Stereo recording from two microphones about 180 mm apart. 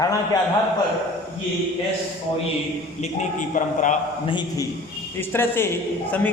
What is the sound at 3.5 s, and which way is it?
Speech, 40° left (ahead or behind).